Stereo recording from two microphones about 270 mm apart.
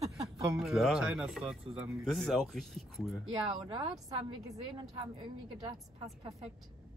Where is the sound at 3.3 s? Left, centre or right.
Centre.